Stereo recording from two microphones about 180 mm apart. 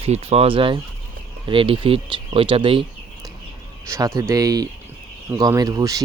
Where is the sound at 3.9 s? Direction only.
15° right (ahead or behind).